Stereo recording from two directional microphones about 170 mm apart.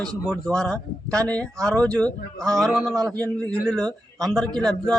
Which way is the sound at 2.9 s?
20° right (ahead or behind).